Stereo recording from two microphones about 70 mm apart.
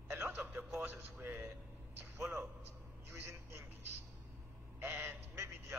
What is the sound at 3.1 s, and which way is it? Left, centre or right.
Vehicle, right.